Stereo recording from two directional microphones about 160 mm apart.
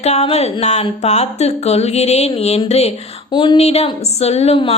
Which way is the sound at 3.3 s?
30° left (ahead or behind).